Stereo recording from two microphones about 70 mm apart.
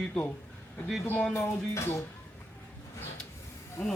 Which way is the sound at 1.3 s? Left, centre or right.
Left.